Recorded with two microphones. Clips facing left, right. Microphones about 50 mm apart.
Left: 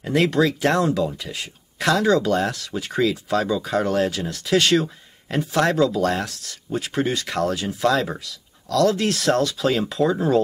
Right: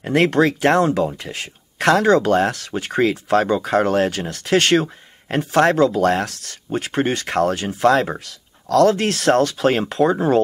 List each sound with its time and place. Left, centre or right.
0.0 s speech: right